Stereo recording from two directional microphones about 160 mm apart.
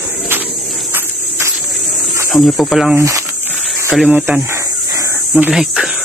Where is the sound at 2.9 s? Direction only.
20° right (ahead or behind).